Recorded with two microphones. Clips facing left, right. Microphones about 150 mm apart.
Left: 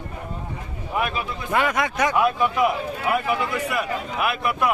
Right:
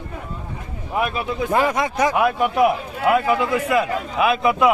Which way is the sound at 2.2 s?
65° right (ahead or behind).